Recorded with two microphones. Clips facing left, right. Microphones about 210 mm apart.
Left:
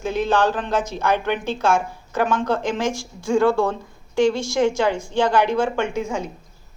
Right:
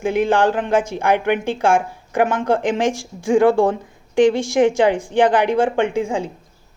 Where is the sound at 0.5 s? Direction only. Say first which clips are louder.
Right 5 dB; 15° right (ahead or behind).